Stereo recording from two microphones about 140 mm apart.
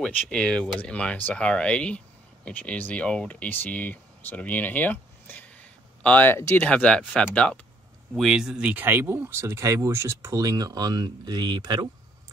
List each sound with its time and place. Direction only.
0.0 s speech: 5° left (ahead or behind)
8.1 s speech: 5° right (ahead or behind); by 11.9 s 30° right (ahead or behind)